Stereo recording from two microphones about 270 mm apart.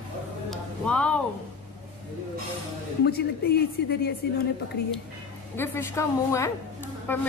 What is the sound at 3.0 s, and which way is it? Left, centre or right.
Speech, left.